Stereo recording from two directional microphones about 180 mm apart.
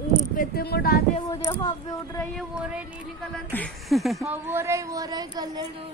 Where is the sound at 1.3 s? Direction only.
20° left (ahead or behind).